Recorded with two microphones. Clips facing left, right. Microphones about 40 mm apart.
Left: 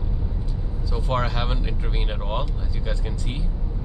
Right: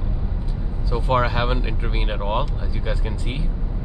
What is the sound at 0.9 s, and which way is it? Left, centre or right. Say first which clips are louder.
Speech: right 5 dB; centre.